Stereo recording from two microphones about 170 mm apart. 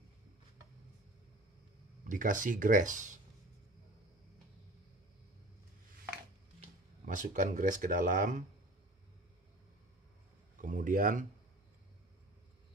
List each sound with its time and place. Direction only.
2.0 s speech: 50° right (ahead or behind)
7.1 s speech: 50° right (ahead or behind)
10.6 s speech: 50° right (ahead or behind)